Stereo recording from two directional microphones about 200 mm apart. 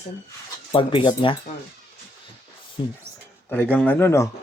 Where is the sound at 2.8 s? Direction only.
25° left (ahead or behind).